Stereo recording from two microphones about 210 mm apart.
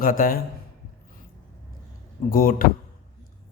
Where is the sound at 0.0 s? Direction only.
45° left (ahead or behind).